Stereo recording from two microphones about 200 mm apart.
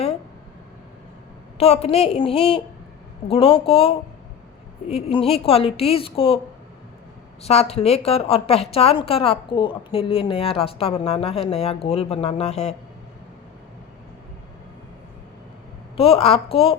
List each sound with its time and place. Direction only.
1.5 s a woman's voice: 30° left (ahead or behind)
7.4 s a woman's voice: 30° left (ahead or behind)
16.0 s a woman's voice: 30° left (ahead or behind)